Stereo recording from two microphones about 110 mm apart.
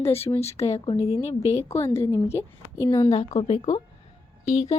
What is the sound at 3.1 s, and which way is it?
Speech, 85° left.